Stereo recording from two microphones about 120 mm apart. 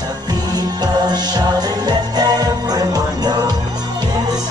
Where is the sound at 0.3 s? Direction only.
35° right (ahead or behind).